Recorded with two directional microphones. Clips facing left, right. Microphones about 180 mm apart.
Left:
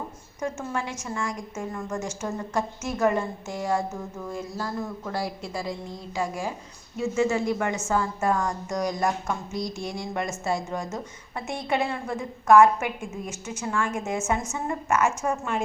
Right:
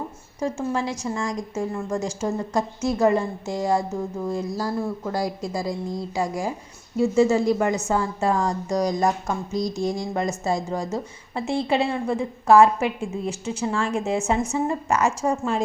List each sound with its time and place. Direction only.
0.3 s speech: 30° right (ahead or behind)